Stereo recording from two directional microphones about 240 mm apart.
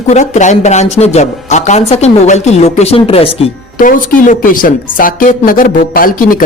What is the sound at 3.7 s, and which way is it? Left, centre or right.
Speech, left.